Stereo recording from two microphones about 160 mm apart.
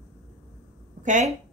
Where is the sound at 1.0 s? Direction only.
50° right (ahead or behind).